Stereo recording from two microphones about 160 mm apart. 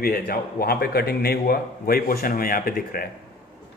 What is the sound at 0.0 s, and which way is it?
A man's voice, 65° left (ahead or behind).